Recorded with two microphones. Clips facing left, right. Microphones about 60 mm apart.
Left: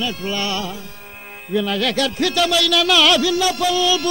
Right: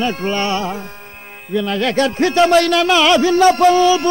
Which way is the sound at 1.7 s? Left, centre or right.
Right.